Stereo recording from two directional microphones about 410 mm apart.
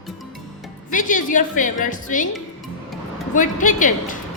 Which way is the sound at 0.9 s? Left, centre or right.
Centre.